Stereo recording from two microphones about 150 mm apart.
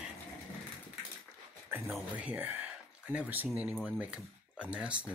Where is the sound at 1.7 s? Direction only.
15° right (ahead or behind).